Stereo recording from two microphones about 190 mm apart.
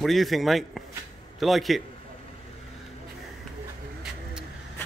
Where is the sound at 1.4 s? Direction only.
Centre (ahead or behind).